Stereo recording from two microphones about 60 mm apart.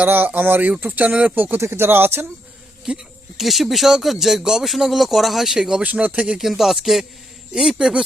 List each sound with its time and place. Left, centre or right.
0.0 s speech: right
1.4 s speech: right
2.9 s speech: centre
3.3 s speech: centre
5.8 s speech: right
6.4 s speech: centre